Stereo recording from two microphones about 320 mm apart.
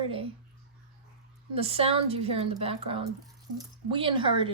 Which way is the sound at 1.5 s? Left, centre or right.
Centre.